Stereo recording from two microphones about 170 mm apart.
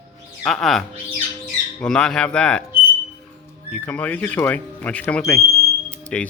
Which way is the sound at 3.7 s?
10° left (ahead or behind).